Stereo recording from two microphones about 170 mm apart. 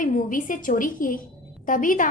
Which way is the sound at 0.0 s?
50° left (ahead or behind).